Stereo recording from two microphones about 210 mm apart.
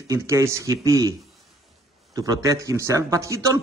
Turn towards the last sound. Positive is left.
turn(degrees=-15)  # may be behind; listen again after turning